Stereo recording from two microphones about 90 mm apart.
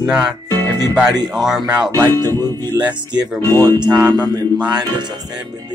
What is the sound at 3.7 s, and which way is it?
Speech, 50° right (ahead or behind).